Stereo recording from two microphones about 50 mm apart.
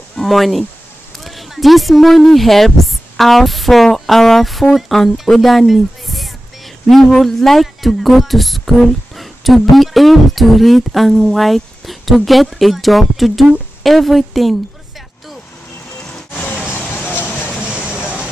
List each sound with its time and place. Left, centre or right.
0.2 s speech: centre
17.1 s a sound: left
17.6 s vehicle: right